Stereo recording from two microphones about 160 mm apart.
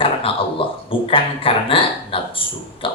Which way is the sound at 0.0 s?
35° left (ahead or behind).